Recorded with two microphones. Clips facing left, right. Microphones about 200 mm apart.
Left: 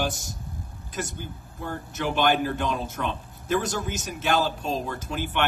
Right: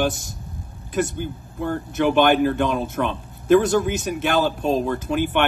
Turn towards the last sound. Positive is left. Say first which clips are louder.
# right 9 dB
turn(degrees=-55)  # may be behind; listen again after turning